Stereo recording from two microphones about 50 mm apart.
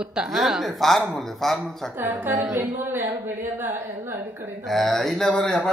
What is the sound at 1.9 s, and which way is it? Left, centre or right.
A woman's voice, right.